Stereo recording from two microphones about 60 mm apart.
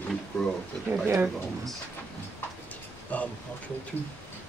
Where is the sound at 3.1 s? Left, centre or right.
Left.